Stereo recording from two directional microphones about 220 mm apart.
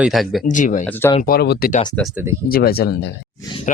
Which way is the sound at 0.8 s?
10° left (ahead or behind).